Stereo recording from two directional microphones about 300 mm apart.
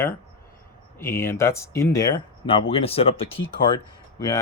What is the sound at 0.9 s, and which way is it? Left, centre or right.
Speech, centre.